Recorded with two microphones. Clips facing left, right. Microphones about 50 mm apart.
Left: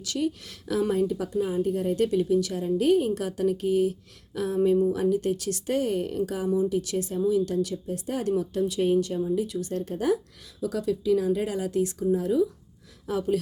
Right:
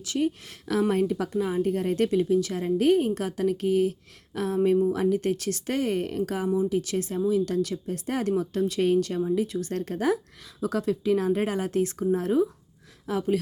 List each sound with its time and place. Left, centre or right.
0.0 s a woman's voice: right
0.7 s speech: right
2.0 s a woman's voice: right
9.5 s a woman's voice: right
9.7 s a woman's voice: right